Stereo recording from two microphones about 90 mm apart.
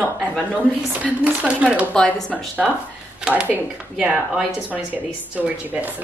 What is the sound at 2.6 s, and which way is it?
Speech, centre (ahead or behind).